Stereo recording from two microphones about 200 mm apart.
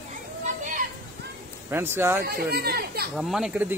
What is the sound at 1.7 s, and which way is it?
Speech, 10° right (ahead or behind).